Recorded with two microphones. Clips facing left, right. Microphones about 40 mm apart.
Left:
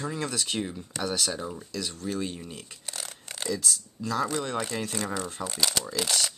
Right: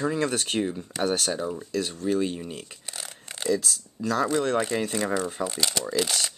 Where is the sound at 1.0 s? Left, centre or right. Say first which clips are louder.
Right 4 dB; right.